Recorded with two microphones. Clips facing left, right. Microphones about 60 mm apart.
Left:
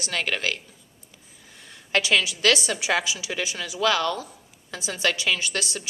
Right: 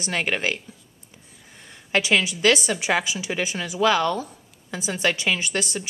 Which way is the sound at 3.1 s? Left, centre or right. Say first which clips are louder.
Right 3 dB; right.